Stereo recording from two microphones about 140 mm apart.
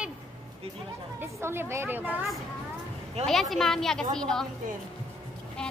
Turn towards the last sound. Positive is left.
turn(degrees=5)  # may be behind; listen again after turning